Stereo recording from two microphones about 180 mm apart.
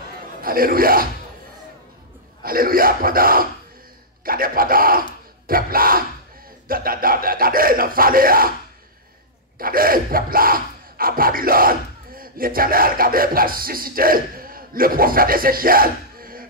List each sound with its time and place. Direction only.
0.4 s speech: 55° right (ahead or behind)
2.4 s speech: 55° right (ahead or behind)
9.6 s a sound: 55° right (ahead or behind)